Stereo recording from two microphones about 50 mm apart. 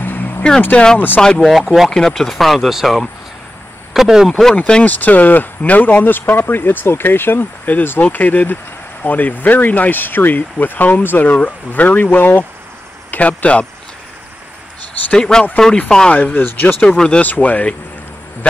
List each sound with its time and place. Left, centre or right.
0.0 s vehicle: left
0.6 s speech: left
0.9 s speech: left
1.4 s speech: centre
1.9 s a man's voice: centre
4.3 s speech: centre
4.8 s speech: left
13.4 s speech: left
15.1 s speech: centre
16.1 s speech: left
16.8 s speech: centre
17.2 s speech: left